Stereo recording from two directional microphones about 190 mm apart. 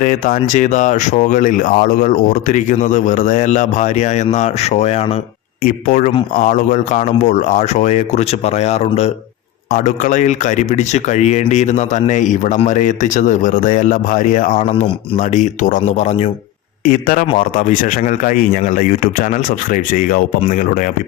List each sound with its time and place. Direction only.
0.0 s speech: 40° left (ahead or behind)
5.6 s speech: 45° left (ahead or behind)
16.8 s speech: 45° left (ahead or behind)